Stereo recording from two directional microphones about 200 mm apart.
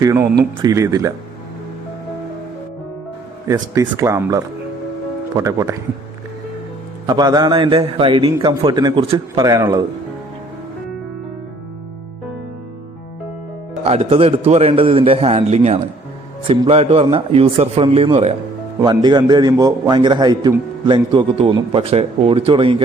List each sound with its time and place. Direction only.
0.0 s speech: 15° right (ahead or behind)
3.4 s speech: 15° right (ahead or behind)
7.1 s a man's voice: 20° right (ahead or behind)
13.8 s a man's voice: 30° right (ahead or behind)